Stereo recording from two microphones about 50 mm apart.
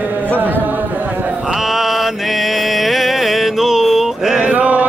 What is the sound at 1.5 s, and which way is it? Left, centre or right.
Mantra, centre.